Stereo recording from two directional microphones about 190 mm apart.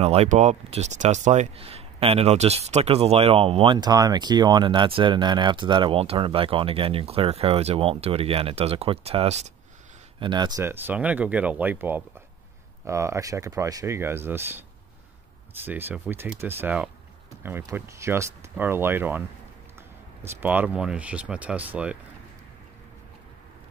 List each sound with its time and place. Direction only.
0.0 s speech: 35° right (ahead or behind)
10.6 s speech: 10° right (ahead or behind)
20.2 s speech: 10° right (ahead or behind)